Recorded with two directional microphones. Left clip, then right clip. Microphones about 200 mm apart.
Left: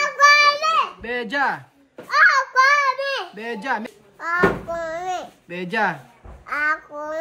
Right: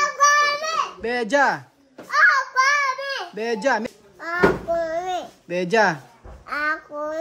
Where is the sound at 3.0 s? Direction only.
40° right (ahead or behind).